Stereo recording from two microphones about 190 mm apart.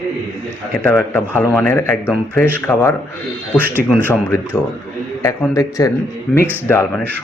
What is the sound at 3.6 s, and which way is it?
Speech, 10° right (ahead or behind).